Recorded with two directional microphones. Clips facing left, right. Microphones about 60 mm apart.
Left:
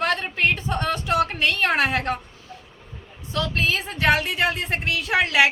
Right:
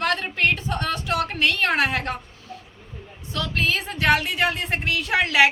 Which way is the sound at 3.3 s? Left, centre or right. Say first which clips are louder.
Left 1 dB; centre.